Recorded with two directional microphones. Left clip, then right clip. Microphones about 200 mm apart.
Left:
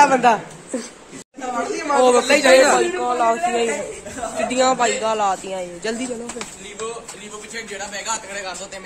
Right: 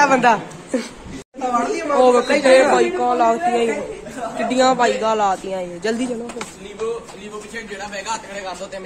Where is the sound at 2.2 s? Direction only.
45° left (ahead or behind).